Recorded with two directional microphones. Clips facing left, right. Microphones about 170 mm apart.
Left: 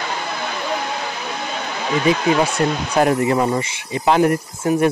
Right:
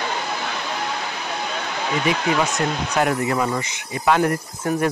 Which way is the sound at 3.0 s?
25° left (ahead or behind).